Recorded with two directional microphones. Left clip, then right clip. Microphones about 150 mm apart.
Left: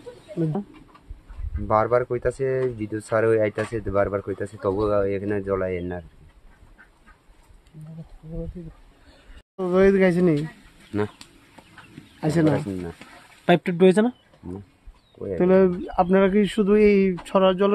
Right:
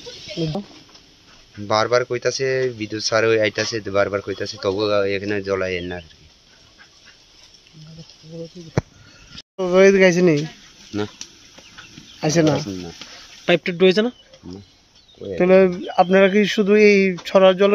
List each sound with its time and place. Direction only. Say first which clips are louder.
1.7 s speech: right 2 dB; 5° right (ahead or behind)
9.6 s speech: right 5 dB; 20° right (ahead or behind)
12.2 s speech: right 4 dB; 15° right (ahead or behind)
13.5 s speech: right 2 dB; 45° left (ahead or behind)
15.3 s speech: right 4 dB; 15° right (ahead or behind)